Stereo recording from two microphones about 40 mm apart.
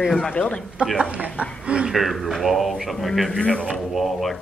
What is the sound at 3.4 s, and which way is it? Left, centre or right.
Speech, left.